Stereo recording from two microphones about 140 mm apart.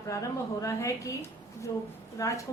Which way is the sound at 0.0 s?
25° left (ahead or behind).